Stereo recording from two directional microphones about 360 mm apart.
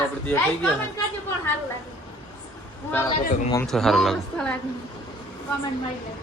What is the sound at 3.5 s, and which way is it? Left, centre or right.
Speech, centre.